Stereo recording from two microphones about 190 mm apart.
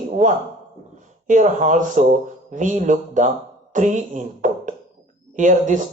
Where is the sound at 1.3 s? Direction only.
40° right (ahead or behind).